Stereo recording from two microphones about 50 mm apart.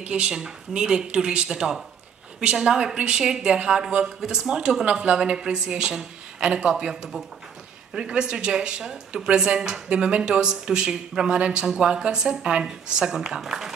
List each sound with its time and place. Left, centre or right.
0.1 s a woman's voice: centre